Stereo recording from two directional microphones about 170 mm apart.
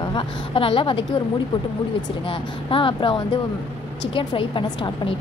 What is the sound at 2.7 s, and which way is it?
A woman's voice, 30° left (ahead or behind).